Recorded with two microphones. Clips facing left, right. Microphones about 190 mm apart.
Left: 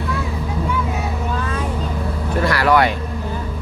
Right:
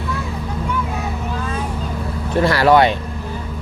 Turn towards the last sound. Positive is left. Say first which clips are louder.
# right 3 dB
turn(degrees=-25)  # may be behind; listen again after turning